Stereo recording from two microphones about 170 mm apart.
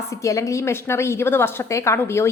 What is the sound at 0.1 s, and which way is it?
A woman's voice, 20° left (ahead or behind).